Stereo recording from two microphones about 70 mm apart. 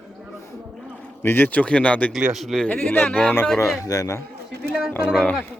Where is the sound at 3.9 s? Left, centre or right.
Left.